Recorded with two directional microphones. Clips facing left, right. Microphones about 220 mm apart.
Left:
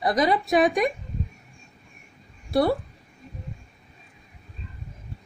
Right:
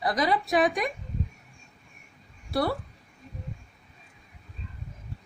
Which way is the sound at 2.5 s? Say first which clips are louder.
Left 6 dB; 20° left (ahead or behind).